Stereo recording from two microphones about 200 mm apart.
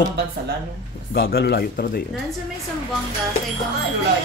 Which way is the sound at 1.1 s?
50° left (ahead or behind).